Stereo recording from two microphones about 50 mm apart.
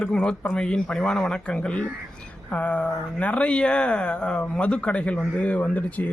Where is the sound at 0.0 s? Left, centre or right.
Left.